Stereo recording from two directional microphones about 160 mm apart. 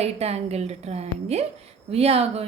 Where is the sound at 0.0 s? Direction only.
40° right (ahead or behind).